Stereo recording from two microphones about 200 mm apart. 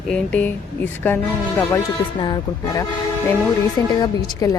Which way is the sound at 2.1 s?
20° left (ahead or behind).